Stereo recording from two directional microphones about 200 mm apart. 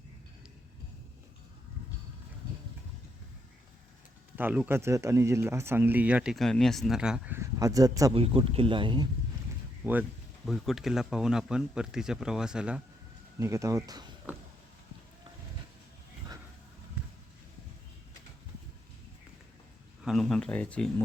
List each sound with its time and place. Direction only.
4.4 s speech: 10° right (ahead or behind); by 9.0 s 25° right (ahead or behind)
9.8 s speech: 10° right (ahead or behind)
13.4 s speech: 15° right (ahead or behind)
20.1 s speech: centre (ahead or behind)